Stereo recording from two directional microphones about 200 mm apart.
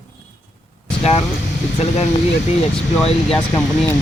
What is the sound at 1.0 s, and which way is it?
Speech, 30° left (ahead or behind).